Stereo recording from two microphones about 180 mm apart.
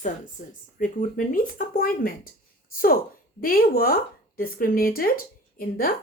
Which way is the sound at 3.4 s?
55° left (ahead or behind).